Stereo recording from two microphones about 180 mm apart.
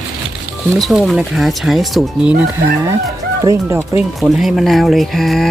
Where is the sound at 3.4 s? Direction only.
15° right (ahead or behind).